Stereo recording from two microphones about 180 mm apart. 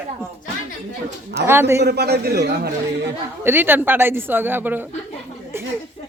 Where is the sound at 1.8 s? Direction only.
65° right (ahead or behind).